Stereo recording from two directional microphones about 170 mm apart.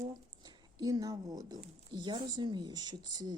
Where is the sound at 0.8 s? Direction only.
20° right (ahead or behind).